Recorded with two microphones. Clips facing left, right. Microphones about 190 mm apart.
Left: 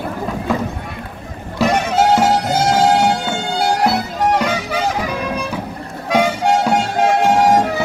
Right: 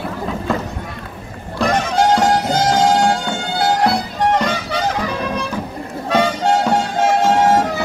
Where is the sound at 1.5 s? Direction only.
5° left (ahead or behind).